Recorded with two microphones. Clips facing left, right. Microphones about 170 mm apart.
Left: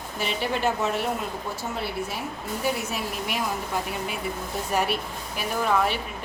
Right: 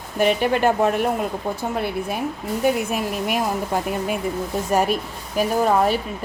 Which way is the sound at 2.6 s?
50° right (ahead or behind).